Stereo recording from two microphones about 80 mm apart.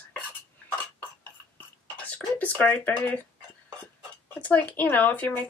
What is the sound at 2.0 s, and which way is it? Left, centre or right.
Speech, centre.